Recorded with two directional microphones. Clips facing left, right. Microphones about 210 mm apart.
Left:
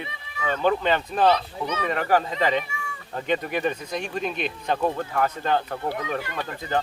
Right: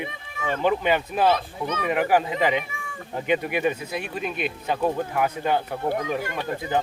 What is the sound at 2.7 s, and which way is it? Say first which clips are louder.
Cat: left 2 dB; 50° right (ahead or behind).